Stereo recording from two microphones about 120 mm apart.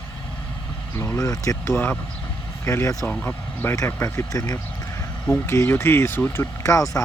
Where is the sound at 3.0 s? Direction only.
15° left (ahead or behind).